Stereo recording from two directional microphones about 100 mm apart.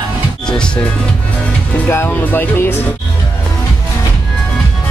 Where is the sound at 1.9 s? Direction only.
25° left (ahead or behind).